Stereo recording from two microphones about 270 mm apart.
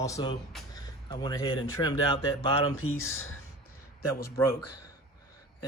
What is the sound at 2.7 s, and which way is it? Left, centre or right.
Speech, left.